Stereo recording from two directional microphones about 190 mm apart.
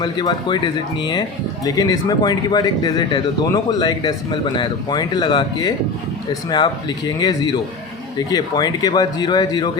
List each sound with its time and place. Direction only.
0.0 s speech: 25° left (ahead or behind)